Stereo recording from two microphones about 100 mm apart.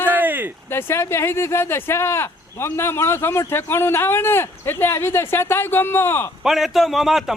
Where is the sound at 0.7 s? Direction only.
25° left (ahead or behind).